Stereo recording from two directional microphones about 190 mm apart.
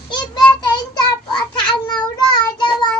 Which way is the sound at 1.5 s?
20° left (ahead or behind).